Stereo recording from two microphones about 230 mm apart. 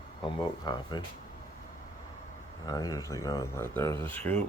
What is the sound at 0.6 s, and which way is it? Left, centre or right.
Speech, centre.